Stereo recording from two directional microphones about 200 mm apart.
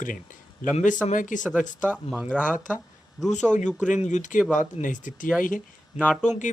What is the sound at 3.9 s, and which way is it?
A man's voice, 35° left (ahead or behind).